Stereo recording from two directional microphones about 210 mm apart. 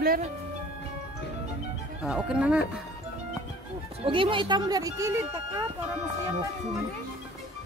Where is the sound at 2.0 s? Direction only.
5° right (ahead or behind).